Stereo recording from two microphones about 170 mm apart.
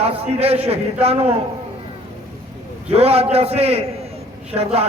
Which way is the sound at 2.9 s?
35° right (ahead or behind).